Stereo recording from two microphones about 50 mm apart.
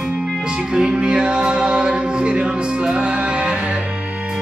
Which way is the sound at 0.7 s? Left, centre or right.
Centre.